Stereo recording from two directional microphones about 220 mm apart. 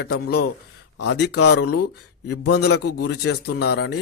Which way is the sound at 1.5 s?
90° left.